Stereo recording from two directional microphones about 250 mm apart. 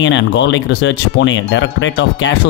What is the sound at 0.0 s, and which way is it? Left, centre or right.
Speech, left.